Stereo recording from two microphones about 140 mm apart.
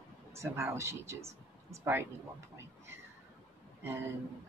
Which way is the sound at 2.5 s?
20° right (ahead or behind).